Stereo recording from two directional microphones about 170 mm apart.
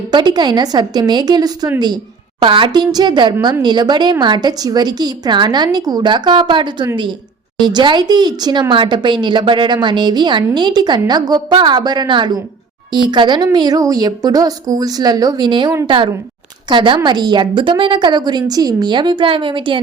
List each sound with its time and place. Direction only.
0.1 s speech: 25° right (ahead or behind)